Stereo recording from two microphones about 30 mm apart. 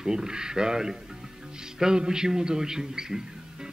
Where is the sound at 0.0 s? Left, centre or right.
Right.